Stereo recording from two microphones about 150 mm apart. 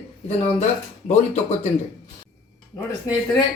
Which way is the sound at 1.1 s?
50° left (ahead or behind).